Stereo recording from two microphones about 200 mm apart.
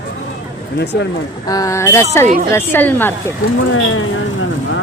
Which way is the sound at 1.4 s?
15° left (ahead or behind).